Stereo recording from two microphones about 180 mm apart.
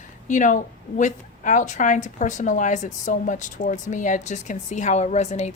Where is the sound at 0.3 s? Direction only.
45° left (ahead or behind).